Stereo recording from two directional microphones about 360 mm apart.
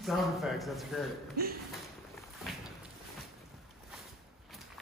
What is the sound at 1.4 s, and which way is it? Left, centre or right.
Speech, right.